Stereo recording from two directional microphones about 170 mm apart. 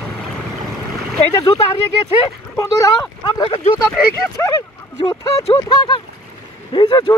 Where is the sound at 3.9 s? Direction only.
15° left (ahead or behind).